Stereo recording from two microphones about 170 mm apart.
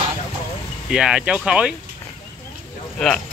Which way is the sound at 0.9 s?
5° right (ahead or behind).